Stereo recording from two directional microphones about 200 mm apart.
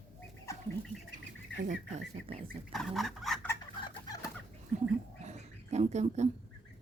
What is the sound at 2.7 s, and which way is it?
Fowl, centre (ahead or behind).